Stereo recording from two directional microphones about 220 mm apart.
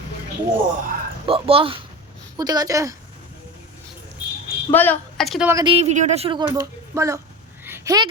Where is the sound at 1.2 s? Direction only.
25° right (ahead or behind).